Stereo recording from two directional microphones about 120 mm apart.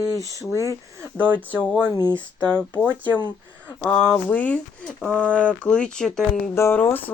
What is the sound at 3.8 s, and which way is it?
Speech, 5° left (ahead or behind).